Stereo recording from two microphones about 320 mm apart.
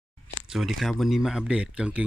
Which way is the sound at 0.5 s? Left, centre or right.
Centre.